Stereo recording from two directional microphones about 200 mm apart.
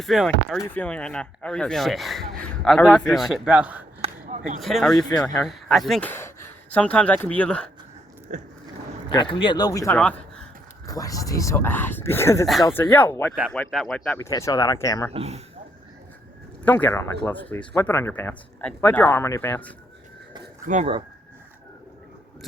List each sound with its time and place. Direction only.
0.0 s speech: centre (ahead or behind)
4.0 s a sound: 35° right (ahead or behind)
4.6 s speech: centre (ahead or behind)
8.3 s speech: 40° right (ahead or behind)
9.0 s a man's voice: 25° left (ahead or behind); by 10.4 s 5° left (ahead or behind)
10.8 s speech: 15° left (ahead or behind)
14.3 s speech: 15° left (ahead or behind)
15.1 s speech: 30° right (ahead or behind)
16.6 s speech: 10° left (ahead or behind)
20.7 s speech: 35° right (ahead or behind)